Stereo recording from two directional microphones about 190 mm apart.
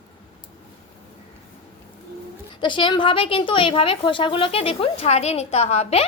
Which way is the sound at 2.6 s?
25° left (ahead or behind).